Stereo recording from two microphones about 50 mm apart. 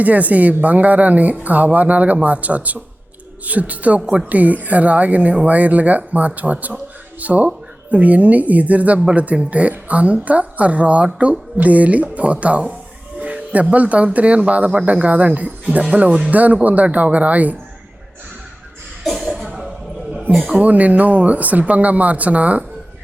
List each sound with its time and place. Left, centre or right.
0.0 s speech: right
20.6 s speech: right